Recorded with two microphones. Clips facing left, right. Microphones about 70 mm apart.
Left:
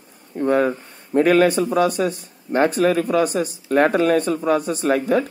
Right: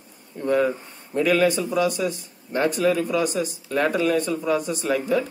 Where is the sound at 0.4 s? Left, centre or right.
Left.